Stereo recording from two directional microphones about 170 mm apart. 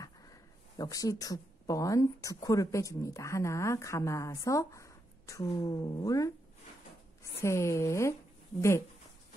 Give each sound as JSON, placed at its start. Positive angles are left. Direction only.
{"t": 0.0, "sound": "speech", "side_deg": 20}
{"t": 7.3, "sound": "speech", "side_deg": 15}